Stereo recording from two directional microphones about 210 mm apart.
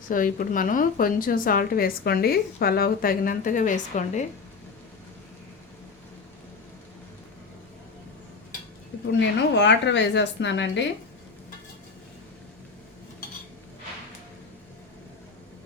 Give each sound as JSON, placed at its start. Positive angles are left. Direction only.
{"t": 0.1, "sound": "a woman's voice", "side_deg": 40}
{"t": 9.6, "sound": "speech", "side_deg": 60}